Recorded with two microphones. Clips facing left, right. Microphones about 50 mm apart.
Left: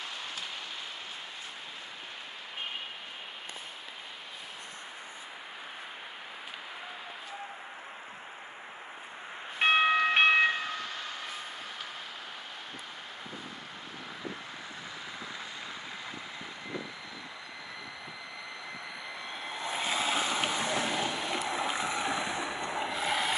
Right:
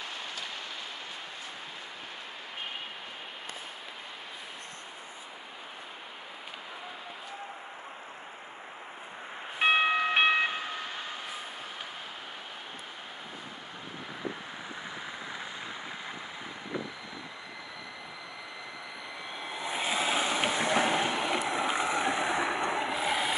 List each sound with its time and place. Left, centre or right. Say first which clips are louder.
9.6 s a sound: left 1 dB; centre
19.3 s vehicle: right 1 dB; centre
22.3 s boat: right 5 dB; right
22.8 s vehicle: right 1 dB; centre